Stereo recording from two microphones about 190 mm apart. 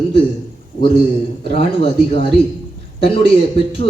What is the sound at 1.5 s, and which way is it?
Speech, 30° left (ahead or behind).